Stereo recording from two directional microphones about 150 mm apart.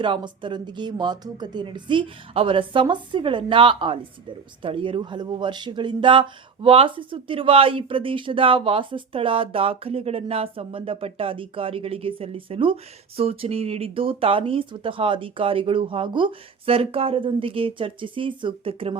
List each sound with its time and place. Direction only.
0.0 s speech: 35° right (ahead or behind)